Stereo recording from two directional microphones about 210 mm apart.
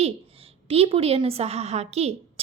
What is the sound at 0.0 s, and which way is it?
A woman's voice, 30° right (ahead or behind).